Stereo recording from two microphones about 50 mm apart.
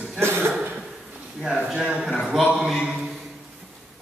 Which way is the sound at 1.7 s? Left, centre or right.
Right.